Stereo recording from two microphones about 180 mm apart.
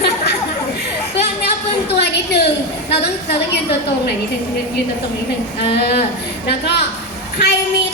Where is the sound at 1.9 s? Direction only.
70° left (ahead or behind).